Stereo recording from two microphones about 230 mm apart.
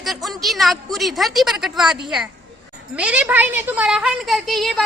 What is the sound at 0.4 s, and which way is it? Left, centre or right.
A woman's voice, centre.